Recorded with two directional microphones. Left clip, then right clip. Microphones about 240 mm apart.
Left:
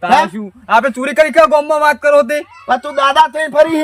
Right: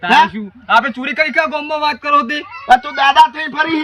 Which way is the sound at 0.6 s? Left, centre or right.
Centre.